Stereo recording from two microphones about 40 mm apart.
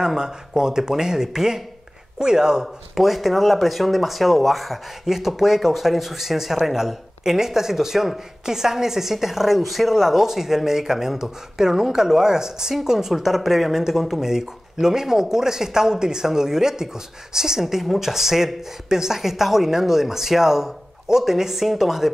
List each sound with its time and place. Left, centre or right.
0.0 s speech: centre
2.6 s speech: centre